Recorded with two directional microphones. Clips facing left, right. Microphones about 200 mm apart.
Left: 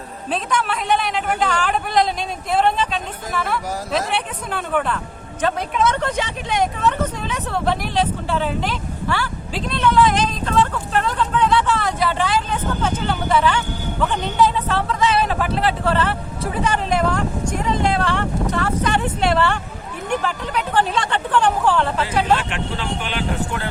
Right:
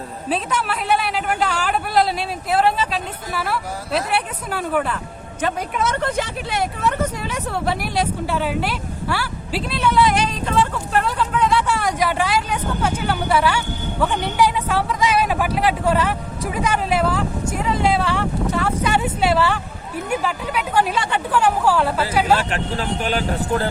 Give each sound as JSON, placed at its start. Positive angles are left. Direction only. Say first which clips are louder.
{"t": 0.3, "sound": "speech", "louder": "even", "side_deg": -5}
{"t": 22.4, "sound": "speech", "louder": "right 3 dB", "side_deg": -40}